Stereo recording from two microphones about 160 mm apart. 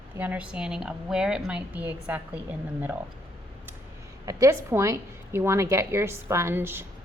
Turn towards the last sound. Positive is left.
turn(degrees=-15)  # may be behind; listen again after turning